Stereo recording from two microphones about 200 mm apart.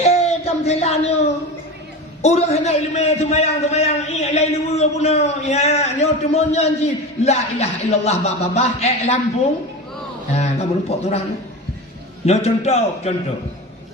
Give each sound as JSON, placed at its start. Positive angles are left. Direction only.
{"t": 0.0, "sound": "a sound", "side_deg": 30}
{"t": 2.2, "sound": "a man's voice", "side_deg": 30}
{"t": 10.3, "sound": "a man's voice", "side_deg": 35}
{"t": 12.2, "sound": "a man's voice", "side_deg": 30}